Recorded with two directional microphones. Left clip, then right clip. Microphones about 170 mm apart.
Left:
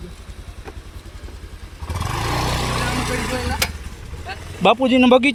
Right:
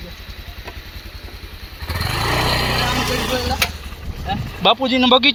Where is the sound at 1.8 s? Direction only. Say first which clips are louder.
Right 4 dB; 25° right (ahead or behind).